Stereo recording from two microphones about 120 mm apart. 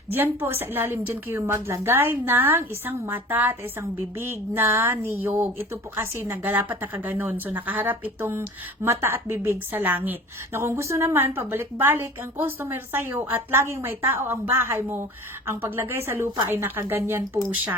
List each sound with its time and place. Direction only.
0.1 s a woman's voice: 15° right (ahead or behind)